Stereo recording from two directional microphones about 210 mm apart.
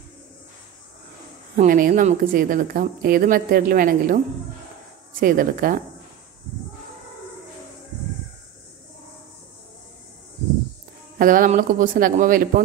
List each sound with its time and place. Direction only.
1.6 s a woman's voice: 40° right (ahead or behind)
5.2 s a woman's voice: 40° right (ahead or behind)
11.1 s a woman's voice: 40° right (ahead or behind)